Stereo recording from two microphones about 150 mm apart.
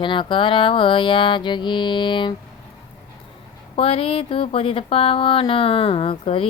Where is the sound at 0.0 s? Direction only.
35° left (ahead or behind).